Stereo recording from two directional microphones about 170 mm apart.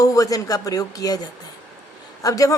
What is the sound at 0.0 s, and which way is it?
A woman's voice, 20° left (ahead or behind).